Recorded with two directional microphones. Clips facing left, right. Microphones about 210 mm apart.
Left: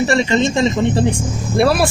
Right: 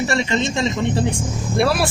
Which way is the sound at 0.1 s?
35° left (ahead or behind).